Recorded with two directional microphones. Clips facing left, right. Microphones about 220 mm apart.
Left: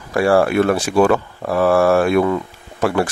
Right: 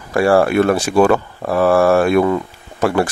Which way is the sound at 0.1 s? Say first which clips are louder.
Right 1 dB; 45° right (ahead or behind).